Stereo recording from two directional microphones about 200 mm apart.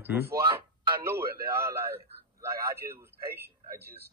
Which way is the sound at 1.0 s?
15° right (ahead or behind).